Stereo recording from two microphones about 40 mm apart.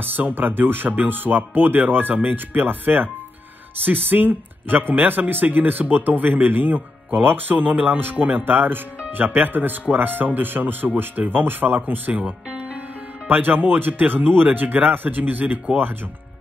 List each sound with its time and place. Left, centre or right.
0.0 s speech: right
12.1 s speech: right
13.3 s speech: right